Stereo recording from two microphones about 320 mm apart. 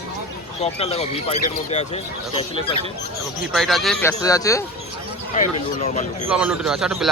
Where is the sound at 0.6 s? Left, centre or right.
Centre.